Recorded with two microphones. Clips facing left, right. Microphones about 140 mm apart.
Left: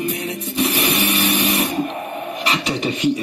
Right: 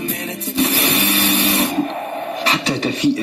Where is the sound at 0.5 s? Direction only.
35° right (ahead or behind).